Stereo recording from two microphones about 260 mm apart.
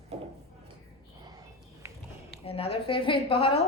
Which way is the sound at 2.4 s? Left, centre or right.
Left.